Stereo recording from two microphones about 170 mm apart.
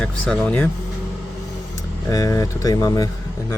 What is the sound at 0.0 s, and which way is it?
Speech, 5° left (ahead or behind).